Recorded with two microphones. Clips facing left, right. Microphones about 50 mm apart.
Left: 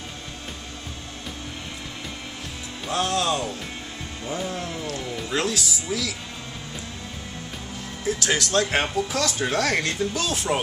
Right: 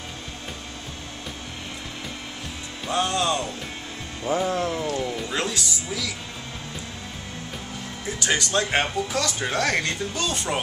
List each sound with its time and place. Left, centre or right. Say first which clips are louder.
2.9 s speech: even; centre
4.3 s music: right 6 dB; right
4.8 s speech: right 3 dB; centre
8.0 s speech: left 1 dB; centre